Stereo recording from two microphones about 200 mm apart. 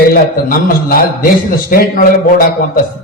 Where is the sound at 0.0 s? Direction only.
45° left (ahead or behind).